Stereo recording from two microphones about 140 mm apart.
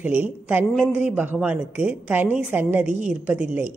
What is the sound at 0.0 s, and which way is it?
Speech, 10° right (ahead or behind).